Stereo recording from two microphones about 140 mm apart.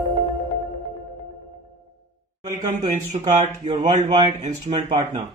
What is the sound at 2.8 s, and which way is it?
Speech, 55° right (ahead or behind).